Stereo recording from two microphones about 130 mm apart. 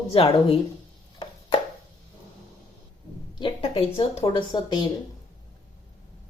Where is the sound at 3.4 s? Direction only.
40° left (ahead or behind).